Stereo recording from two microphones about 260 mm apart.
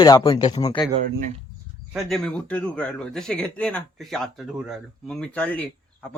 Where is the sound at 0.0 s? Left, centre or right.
Centre.